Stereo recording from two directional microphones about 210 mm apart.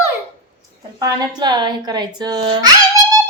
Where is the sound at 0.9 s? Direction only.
20° right (ahead or behind).